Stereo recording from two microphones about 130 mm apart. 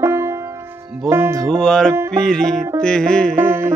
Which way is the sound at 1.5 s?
5° left (ahead or behind).